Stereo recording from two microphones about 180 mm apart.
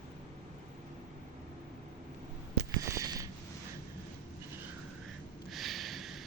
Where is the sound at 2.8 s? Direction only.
20° right (ahead or behind).